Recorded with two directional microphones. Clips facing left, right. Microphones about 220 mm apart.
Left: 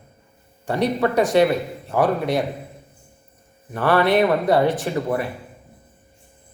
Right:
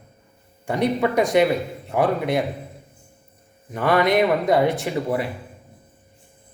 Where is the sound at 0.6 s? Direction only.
15° right (ahead or behind).